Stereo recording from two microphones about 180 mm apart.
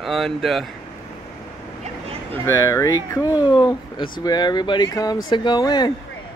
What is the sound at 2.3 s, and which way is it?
Speech, 15° left (ahead or behind).